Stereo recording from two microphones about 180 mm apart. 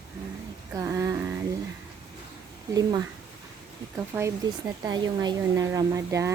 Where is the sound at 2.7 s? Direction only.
20° right (ahead or behind).